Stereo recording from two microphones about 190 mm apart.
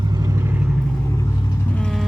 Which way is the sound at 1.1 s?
15° left (ahead or behind).